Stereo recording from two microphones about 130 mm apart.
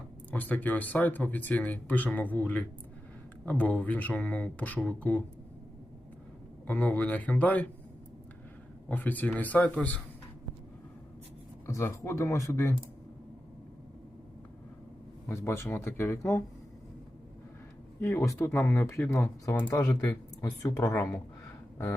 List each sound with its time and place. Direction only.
0.3 s speech: 15° left (ahead or behind)
6.7 s speech: 10° left (ahead or behind)
8.9 s speech: 15° left (ahead or behind)
11.6 s speech: 20° left (ahead or behind)
15.3 s speech: 20° left (ahead or behind)
18.0 s speech: 20° left (ahead or behind)
19.8 s speech: 10° left (ahead or behind)
20.4 s speech: 30° left (ahead or behind)